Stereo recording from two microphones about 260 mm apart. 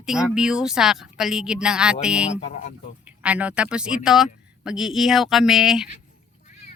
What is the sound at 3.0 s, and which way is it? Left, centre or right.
Speech, centre.